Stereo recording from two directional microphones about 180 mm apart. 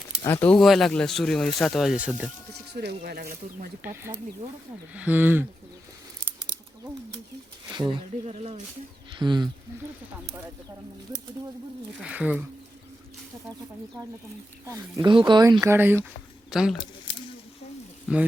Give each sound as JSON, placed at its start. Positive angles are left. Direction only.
{"t": 0.3, "sound": "speech", "side_deg": 10}
{"t": 2.7, "sound": "speech", "side_deg": -65}
{"t": 3.8, "sound": "speech", "side_deg": -10}
{"t": 7.7, "sound": "speech", "side_deg": -25}
{"t": 8.3, "sound": "speech", "side_deg": -35}
{"t": 9.1, "sound": "speech", "side_deg": -25}
{"t": 11.9, "sound": "speech", "side_deg": -5}
{"t": 14.6, "sound": "speech", "side_deg": -20}
{"t": 18.1, "sound": "speech", "side_deg": -5}